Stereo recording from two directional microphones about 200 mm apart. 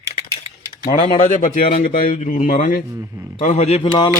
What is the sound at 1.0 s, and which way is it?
A man's voice, 35° left (ahead or behind).